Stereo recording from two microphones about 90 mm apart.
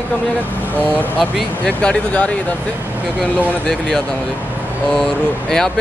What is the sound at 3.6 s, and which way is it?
Speech, 5° left (ahead or behind).